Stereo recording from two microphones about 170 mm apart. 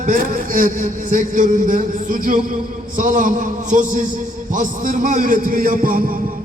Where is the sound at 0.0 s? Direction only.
55° right (ahead or behind).